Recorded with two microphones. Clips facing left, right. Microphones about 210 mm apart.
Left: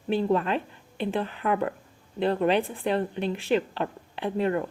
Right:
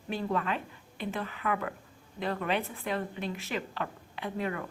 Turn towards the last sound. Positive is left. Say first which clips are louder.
# left 7 dB
turn(degrees=30)  # may be behind; listen again after turning